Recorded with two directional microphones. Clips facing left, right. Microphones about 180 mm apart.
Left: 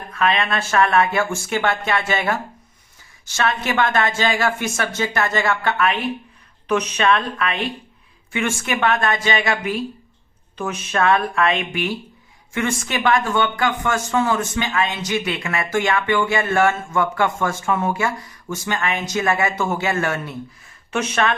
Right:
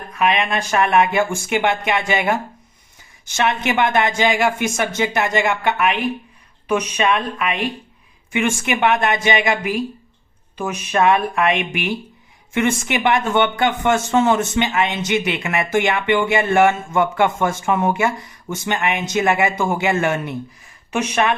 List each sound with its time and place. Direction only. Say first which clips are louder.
0.1 s speech: right 1 dB; 15° right (ahead or behind)
10.6 s speech: right 3 dB; 15° right (ahead or behind)